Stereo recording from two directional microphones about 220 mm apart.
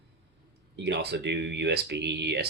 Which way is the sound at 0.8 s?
50° right (ahead or behind).